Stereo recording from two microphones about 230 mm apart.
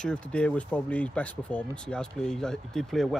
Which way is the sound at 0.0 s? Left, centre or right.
Centre.